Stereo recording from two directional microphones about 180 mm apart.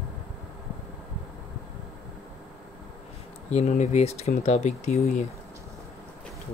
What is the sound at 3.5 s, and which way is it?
Speech, 40° left (ahead or behind).